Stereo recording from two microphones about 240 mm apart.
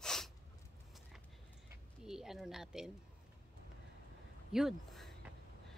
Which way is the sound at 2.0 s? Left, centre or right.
Centre.